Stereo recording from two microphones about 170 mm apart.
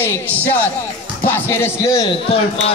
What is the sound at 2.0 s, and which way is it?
Speech, 35° left (ahead or behind).